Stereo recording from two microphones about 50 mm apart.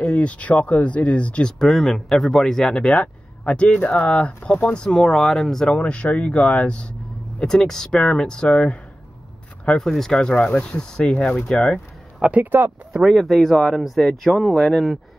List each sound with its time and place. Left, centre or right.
0.0 s speech: left
1.6 s speech: centre
3.0 s speech: left
4.8 s speech: centre
5.8 s speech: left
7.4 s speech: centre
9.8 s speech: centre
12.2 s speech: right
12.4 s speech: right
12.9 s speech: centre